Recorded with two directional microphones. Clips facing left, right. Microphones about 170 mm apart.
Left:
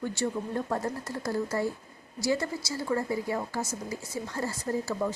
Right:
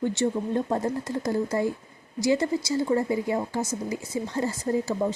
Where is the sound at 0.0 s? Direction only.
20° right (ahead or behind).